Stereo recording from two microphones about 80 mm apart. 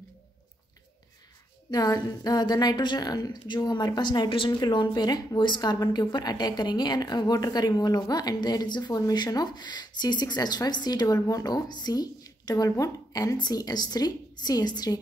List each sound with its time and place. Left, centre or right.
1.7 s a woman's voice: left
4.5 s a woman's voice: left